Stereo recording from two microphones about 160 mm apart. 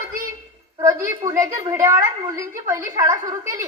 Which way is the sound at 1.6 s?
20° right (ahead or behind).